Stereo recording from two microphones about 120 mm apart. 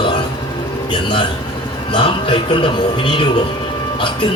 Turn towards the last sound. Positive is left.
turn(degrees=45)  # may be behind; listen again after turning